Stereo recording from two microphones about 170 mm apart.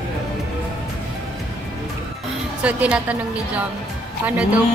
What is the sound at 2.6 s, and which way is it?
A woman's voice, 10° right (ahead or behind).